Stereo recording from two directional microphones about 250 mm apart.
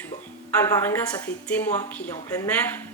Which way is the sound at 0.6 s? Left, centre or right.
Centre.